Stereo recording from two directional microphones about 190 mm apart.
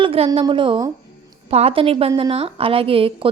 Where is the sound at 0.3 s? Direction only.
25° right (ahead or behind).